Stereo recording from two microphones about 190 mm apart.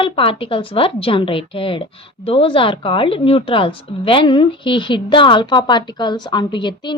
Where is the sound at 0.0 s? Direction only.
30° left (ahead or behind).